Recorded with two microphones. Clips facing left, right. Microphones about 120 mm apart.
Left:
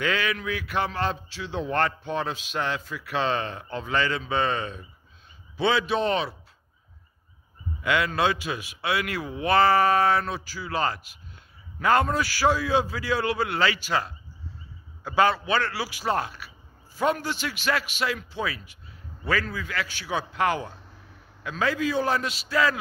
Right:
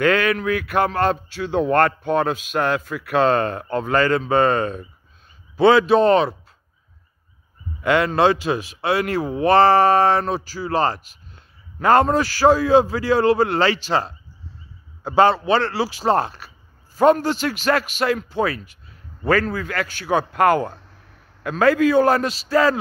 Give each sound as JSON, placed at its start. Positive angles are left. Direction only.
{"t": 0.0, "sound": "a man's voice", "side_deg": -55}
{"t": 7.8, "sound": "a man's voice", "side_deg": -40}
{"t": 22.3, "sound": "speech", "side_deg": -40}